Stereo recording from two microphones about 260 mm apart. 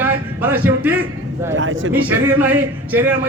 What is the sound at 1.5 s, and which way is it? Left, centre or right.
Speech, right.